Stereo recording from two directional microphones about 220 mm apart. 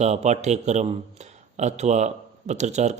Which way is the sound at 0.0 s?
30° right (ahead or behind).